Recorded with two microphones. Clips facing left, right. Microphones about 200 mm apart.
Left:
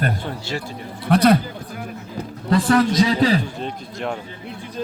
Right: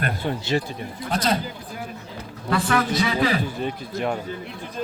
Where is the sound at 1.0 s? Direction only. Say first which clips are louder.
Left 9 dB; 60° left (ahead or behind).